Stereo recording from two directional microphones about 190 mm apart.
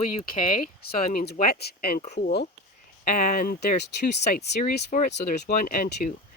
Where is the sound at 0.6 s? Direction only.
50° left (ahead or behind).